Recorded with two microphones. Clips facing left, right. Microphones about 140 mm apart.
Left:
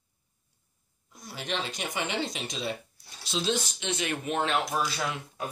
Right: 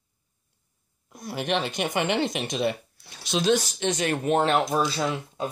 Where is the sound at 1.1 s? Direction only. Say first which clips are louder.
Right 7 dB; 60° right (ahead or behind).